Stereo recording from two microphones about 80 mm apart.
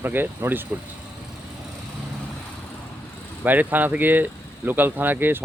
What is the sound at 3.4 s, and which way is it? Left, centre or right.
Speech, right.